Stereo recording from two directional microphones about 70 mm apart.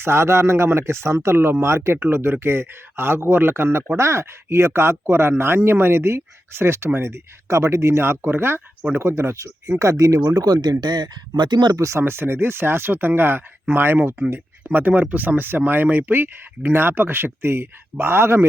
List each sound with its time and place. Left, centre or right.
0.0 s speech: right
11.8 s speech: right